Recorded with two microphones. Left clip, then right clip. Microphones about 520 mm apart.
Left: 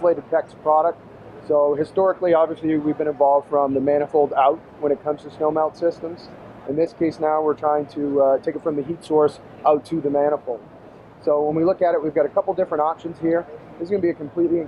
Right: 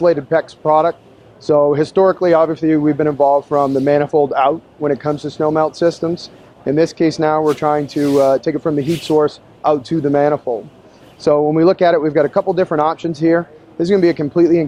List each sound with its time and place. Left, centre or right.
0.0 s speech: right
13.8 s speech: right